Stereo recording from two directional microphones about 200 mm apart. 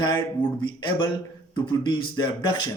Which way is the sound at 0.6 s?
25° left (ahead or behind).